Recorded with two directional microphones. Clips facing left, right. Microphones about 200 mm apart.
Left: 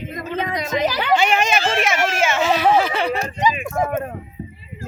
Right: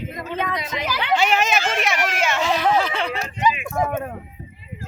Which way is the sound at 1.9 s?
25° left (ahead or behind).